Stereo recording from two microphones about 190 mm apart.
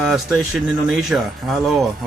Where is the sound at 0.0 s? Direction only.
Centre (ahead or behind).